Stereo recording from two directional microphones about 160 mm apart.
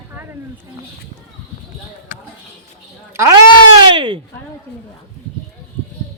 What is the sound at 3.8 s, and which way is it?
Speech, 30° right (ahead or behind).